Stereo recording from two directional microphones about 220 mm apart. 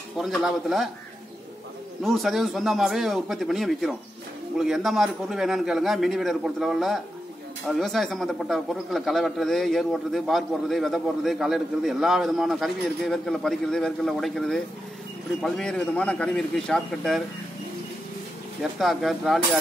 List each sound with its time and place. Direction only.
0.2 s a man's voice: centre (ahead or behind)
2.0 s a man's voice: centre (ahead or behind)
18.6 s a man's voice: centre (ahead or behind)